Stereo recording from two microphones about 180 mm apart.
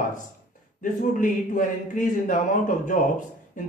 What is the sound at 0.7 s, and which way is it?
Speech, 45° left (ahead or behind).